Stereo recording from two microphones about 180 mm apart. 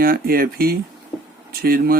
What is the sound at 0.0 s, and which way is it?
Speech, 55° right (ahead or behind).